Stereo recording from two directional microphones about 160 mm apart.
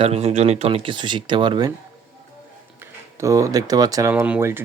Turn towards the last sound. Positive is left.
turn(degrees=-10)  # may be behind; listen again after turning